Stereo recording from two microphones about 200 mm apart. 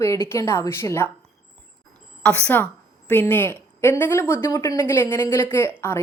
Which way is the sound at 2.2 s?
10° left (ahead or behind).